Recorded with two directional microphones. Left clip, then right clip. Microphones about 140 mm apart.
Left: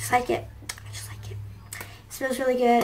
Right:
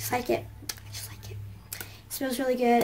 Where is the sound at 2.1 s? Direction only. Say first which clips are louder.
Left 4 dB; 15° right (ahead or behind).